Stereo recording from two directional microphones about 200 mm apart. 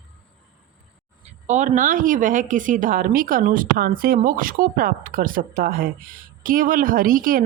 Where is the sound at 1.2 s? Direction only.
35° right (ahead or behind).